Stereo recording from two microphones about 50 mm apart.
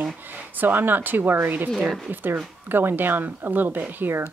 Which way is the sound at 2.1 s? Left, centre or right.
Right.